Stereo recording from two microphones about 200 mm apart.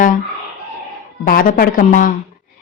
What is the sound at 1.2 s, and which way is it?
Speech, 45° left (ahead or behind).